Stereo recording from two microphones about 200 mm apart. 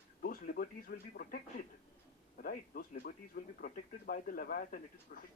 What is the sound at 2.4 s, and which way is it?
Speech, 45° left (ahead or behind).